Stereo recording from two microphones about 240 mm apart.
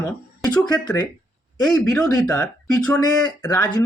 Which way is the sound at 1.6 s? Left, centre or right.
Centre.